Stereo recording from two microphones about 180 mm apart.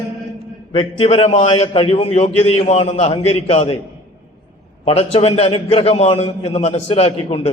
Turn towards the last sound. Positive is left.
turn(degrees=30)  # may be behind; listen again after turning